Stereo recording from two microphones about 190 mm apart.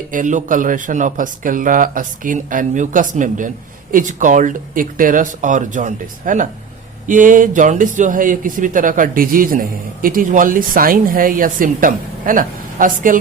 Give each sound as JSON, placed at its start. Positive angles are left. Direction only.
{"t": 0.1, "sound": "speech", "side_deg": -40}